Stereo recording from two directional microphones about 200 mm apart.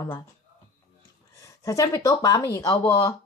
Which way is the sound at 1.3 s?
15° left (ahead or behind).